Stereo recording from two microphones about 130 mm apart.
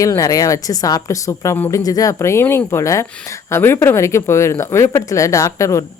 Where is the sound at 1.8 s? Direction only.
25° left (ahead or behind).